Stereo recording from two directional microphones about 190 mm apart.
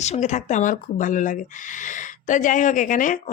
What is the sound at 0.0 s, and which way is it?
Speech, 35° left (ahead or behind).